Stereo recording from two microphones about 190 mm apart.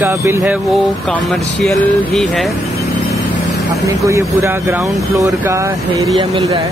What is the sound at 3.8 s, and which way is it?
Speech, 15° right (ahead or behind).